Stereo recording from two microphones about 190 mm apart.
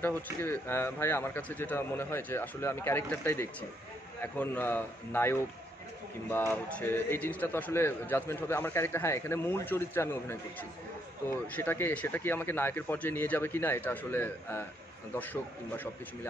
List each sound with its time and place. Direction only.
0.0 s a man's voice: 10° left (ahead or behind)
11.5 s a man's voice: 10° left (ahead or behind)